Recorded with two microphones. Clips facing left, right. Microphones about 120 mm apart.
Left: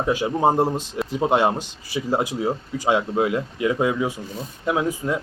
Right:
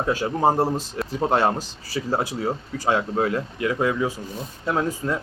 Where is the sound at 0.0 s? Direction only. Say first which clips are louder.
Left 1 dB; 15° left (ahead or behind).